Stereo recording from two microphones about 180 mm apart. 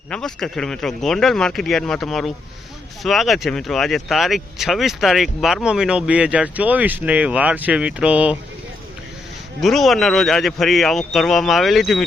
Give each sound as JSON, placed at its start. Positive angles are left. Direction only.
{"t": 0.1, "sound": "speech", "side_deg": 5}
{"t": 9.6, "sound": "speech", "side_deg": 0}